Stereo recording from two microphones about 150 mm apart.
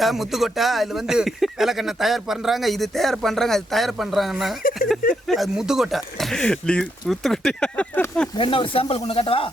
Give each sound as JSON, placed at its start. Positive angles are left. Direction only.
{"t": 0.0, "sound": "speech", "side_deg": 0}
{"t": 8.4, "sound": "speech", "side_deg": 35}